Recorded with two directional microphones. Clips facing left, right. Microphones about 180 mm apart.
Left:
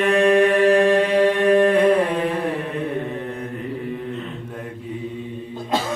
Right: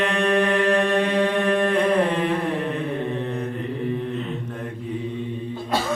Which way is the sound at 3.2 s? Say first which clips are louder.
Right 2 dB; 10° left (ahead or behind).